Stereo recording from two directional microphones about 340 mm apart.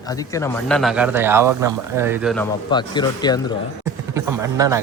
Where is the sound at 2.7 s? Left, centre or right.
Centre.